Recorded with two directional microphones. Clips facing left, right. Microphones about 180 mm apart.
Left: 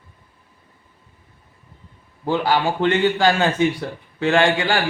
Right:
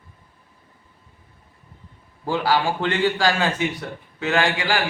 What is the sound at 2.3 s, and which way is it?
A man's voice, 20° left (ahead or behind).